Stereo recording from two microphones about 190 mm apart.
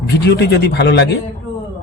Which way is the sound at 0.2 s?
60° left (ahead or behind).